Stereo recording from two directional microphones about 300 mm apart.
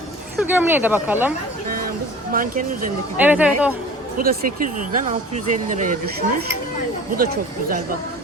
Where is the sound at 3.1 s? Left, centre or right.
Centre.